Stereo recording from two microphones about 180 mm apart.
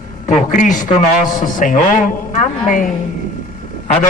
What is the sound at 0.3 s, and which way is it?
A man's voice, 45° left (ahead or behind).